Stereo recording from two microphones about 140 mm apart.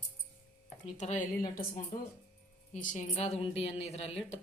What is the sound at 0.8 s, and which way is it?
Speech, 55° left (ahead or behind).